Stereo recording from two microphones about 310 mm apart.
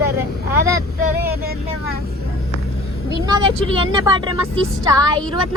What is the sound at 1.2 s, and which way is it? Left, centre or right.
Speech, right.